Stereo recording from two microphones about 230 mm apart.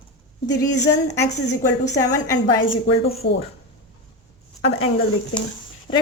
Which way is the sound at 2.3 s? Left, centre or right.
Left.